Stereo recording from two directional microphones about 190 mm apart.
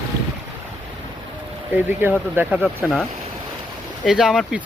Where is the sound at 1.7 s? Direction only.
10° right (ahead or behind).